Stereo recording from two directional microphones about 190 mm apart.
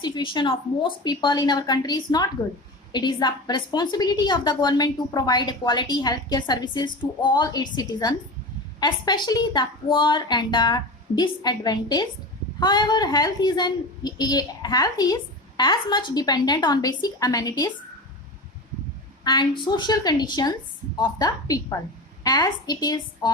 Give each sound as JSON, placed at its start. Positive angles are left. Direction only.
{"t": 0.0, "sound": "a woman's voice", "side_deg": 25}
{"t": 19.2, "sound": "a woman's voice", "side_deg": 20}